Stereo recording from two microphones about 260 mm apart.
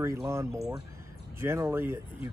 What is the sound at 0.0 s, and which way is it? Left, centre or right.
Speech, centre.